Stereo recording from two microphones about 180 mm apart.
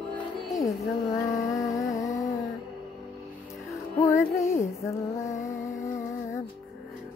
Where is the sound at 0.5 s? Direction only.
20° left (ahead or behind).